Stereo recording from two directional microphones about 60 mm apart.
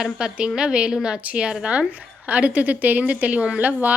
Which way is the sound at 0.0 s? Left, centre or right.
Centre.